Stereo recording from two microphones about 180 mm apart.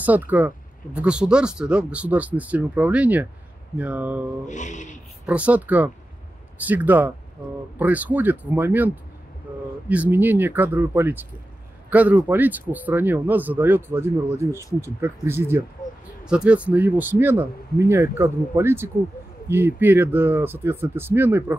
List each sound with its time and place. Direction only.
0.0 s speech: 10° right (ahead or behind)
4.5 s a sound: 45° left (ahead or behind)
5.2 s speech: 5° right (ahead or behind)